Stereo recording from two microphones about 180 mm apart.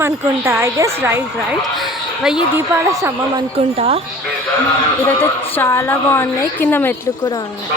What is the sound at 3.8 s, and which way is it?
Speech, 35° right (ahead or behind).